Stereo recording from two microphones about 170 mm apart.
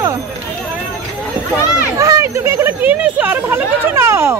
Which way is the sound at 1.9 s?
20° right (ahead or behind).